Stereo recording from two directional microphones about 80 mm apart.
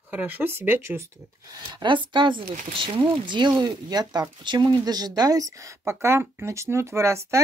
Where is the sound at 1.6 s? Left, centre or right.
Right.